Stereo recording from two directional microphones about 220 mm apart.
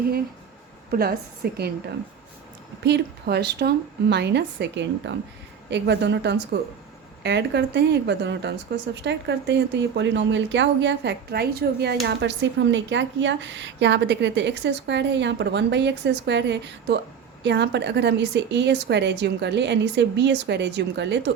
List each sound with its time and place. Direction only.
0.9 s a woman's voice: 45° right (ahead or behind)
2.8 s speech: 50° right (ahead or behind)